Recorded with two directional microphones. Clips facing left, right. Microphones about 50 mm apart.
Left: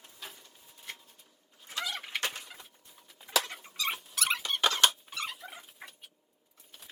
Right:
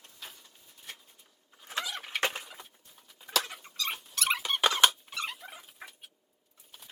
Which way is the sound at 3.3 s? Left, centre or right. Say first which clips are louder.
Left 1 dB; centre.